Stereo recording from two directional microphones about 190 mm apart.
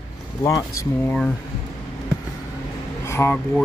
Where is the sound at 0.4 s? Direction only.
20° left (ahead or behind).